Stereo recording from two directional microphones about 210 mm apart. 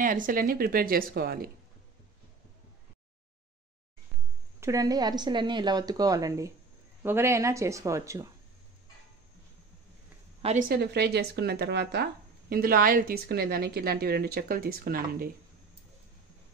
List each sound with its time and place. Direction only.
0.0 s speech: 40° right (ahead or behind)
4.6 s speech: 15° right (ahead or behind)
10.7 s speech: 50° right (ahead or behind)